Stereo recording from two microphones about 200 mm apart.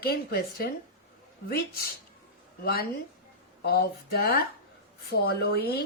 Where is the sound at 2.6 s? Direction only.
50° left (ahead or behind).